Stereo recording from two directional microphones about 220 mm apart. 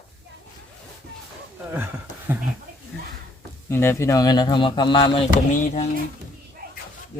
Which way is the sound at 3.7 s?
10° left (ahead or behind).